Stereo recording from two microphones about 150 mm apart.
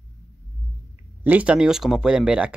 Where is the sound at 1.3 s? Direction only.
10° right (ahead or behind).